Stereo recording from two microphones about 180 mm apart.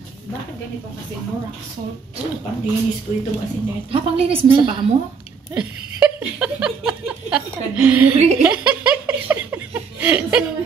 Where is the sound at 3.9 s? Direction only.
30° right (ahead or behind).